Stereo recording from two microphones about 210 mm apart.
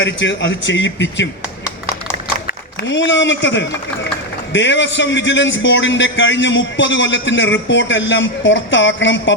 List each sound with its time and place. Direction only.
0.0 s a man's voice: 60° left (ahead or behind)
2.5 s a man's voice: 60° left (ahead or behind)